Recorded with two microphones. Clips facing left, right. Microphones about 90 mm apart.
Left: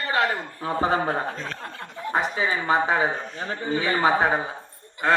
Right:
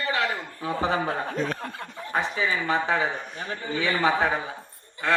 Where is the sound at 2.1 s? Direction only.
30° left (ahead or behind).